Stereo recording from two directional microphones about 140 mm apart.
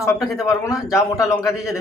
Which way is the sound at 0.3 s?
20° left (ahead or behind).